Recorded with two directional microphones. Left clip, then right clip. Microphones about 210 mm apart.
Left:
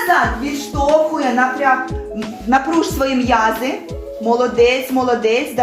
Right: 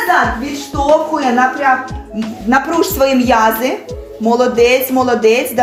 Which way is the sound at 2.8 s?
55° right (ahead or behind).